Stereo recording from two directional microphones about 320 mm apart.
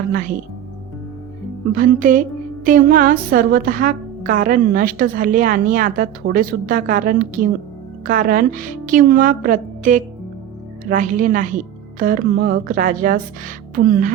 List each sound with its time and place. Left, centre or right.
0.1 s a woman's voice: right
1.7 s a woman's voice: right